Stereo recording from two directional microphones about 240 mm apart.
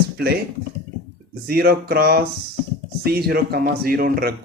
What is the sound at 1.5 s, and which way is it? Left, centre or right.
Speech, right.